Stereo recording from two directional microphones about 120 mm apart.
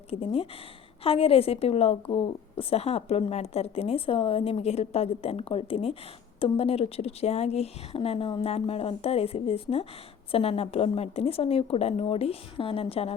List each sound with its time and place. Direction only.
0.1 s a woman's voice: 50° left (ahead or behind)